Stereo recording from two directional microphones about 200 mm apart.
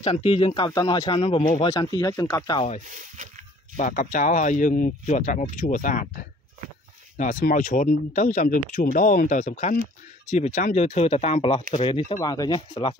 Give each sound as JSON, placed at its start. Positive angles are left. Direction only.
{"t": 0.0, "sound": "speech", "side_deg": 30}
{"t": 0.7, "sound": "speech", "side_deg": 15}
{"t": 2.9, "sound": "speech", "side_deg": -40}
{"t": 3.7, "sound": "speech", "side_deg": 40}
{"t": 7.2, "sound": "speech", "side_deg": 40}